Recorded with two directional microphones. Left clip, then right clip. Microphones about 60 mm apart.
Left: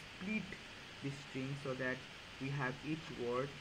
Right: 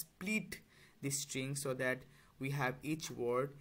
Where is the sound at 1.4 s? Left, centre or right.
Right.